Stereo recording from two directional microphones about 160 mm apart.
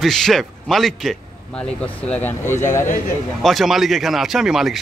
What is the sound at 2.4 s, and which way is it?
Speech, 50° left (ahead or behind).